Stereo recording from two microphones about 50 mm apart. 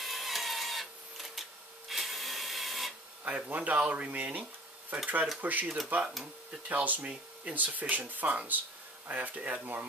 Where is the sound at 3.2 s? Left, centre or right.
Right.